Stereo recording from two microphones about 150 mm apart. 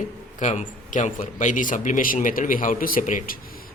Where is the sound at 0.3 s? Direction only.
55° left (ahead or behind).